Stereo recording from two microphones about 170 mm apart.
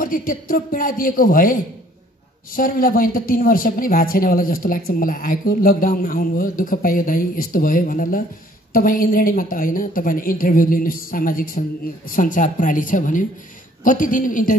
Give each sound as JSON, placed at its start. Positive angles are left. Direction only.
{"t": 0.0, "sound": "speech", "side_deg": 55}